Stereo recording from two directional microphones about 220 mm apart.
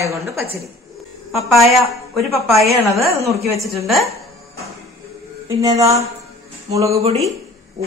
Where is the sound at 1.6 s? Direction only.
Centre (ahead or behind).